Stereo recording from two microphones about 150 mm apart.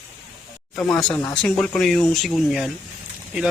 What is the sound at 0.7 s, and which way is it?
Speech, 5° left (ahead or behind).